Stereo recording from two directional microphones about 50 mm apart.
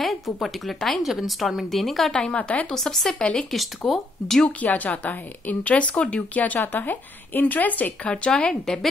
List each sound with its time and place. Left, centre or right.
0.0 s a woman's voice: centre
2.3 s speech: left
2.7 s a woman's voice: centre
3.2 s speech: centre
3.5 s a woman's voice: centre
4.5 s speech: left
8.1 s speech: centre